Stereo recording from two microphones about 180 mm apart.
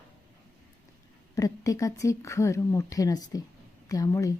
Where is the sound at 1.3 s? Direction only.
20° left (ahead or behind).